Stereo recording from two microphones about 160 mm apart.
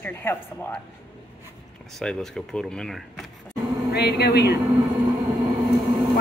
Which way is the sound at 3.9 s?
90° left.